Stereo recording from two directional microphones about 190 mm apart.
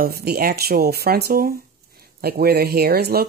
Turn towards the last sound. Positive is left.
turn(degrees=-55)  # may be behind; listen again after turning